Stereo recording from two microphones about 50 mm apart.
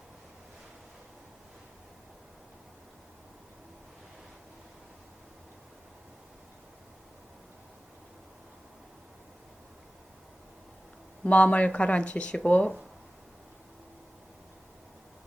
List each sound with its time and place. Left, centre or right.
11.2 s speech: left